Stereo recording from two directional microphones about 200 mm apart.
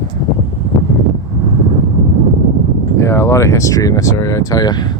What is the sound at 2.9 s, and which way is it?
Speech, 15° left (ahead or behind).